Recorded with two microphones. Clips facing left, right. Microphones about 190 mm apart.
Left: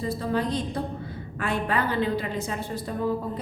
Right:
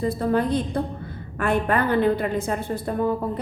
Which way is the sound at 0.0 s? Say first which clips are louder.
Right 5 dB; 55° right (ahead or behind).